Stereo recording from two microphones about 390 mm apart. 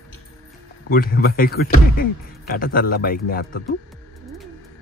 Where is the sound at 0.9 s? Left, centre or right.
Left.